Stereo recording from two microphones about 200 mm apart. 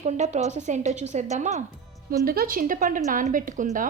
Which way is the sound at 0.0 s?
35° right (ahead or behind).